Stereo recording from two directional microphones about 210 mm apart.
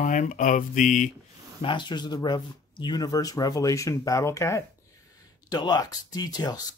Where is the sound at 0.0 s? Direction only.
35° left (ahead or behind).